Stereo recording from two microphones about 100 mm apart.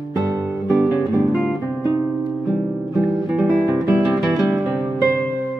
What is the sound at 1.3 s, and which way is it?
Music, 5° left (ahead or behind).